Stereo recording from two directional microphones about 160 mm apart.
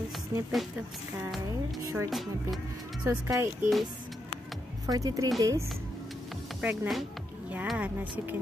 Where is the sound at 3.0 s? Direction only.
15° right (ahead or behind).